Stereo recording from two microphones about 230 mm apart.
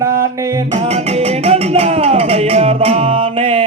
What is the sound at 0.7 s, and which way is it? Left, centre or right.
Music, right.